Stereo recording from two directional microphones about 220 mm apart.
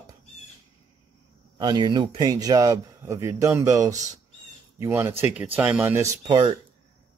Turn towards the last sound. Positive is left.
turn(degrees=-20)  # may be behind; listen again after turning